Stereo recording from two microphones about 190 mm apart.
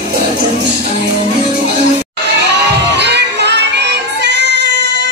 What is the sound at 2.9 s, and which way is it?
Music, 65° right (ahead or behind).